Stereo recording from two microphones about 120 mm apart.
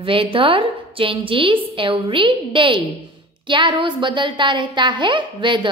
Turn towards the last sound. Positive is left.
turn(degrees=-40)  # may be behind; listen again after turning